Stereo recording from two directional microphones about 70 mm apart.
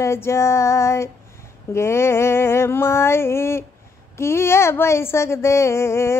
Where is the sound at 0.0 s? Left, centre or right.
Left.